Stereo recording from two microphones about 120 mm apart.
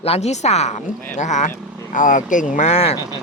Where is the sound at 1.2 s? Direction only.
85° left; by 2.9 s 70° left (ahead or behind).